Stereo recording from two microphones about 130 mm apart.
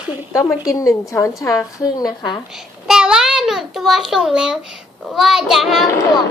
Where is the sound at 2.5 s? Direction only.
5° right (ahead or behind).